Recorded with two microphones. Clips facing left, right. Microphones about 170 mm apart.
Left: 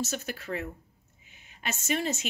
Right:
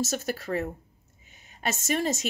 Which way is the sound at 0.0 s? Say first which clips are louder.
Right 4 dB; 40° right (ahead or behind).